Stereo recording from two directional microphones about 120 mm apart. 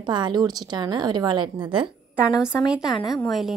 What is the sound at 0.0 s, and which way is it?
A woman's voice, 35° right (ahead or behind).